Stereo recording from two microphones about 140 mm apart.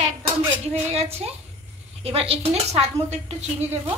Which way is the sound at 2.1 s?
45° right (ahead or behind).